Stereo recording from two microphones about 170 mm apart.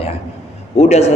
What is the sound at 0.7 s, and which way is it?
Speech, 40° left (ahead or behind).